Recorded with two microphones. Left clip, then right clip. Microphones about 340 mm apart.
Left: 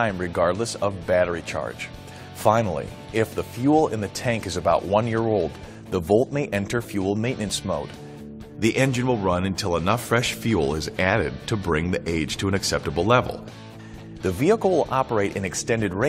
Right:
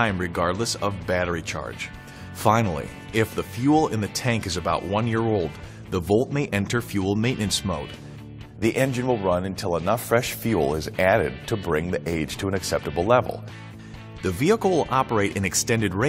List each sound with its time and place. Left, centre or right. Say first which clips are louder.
0.0 s speech: left 1 dB; left
8.5 s a man's voice: left 1 dB; right
14.2 s speech: left 1 dB; left